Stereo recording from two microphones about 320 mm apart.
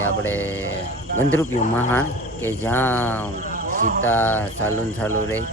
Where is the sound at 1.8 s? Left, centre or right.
Centre.